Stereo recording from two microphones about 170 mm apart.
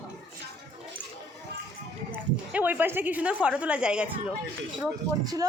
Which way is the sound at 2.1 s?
10° right (ahead or behind).